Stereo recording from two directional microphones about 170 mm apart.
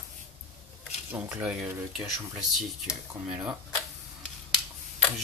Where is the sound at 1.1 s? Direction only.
10° right (ahead or behind).